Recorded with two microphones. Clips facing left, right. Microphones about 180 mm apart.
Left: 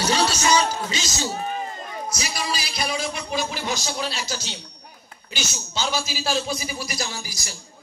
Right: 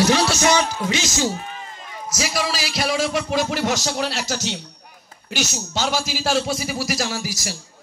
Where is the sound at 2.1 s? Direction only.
90° right.